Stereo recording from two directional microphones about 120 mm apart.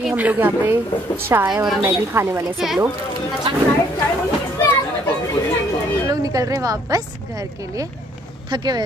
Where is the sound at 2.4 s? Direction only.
5° right (ahead or behind).